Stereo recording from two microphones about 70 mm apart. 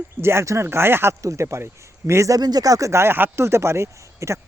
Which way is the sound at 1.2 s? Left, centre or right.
Right.